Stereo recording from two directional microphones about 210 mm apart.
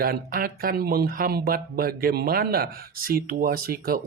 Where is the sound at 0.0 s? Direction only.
45° right (ahead or behind).